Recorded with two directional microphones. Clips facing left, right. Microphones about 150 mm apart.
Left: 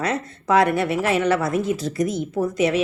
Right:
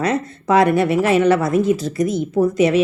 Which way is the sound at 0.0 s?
25° right (ahead or behind).